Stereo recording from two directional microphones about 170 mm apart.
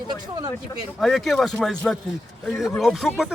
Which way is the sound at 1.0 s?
Centre (ahead or behind).